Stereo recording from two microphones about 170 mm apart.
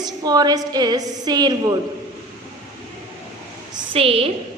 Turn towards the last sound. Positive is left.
turn(degrees=-35)  # may be behind; listen again after turning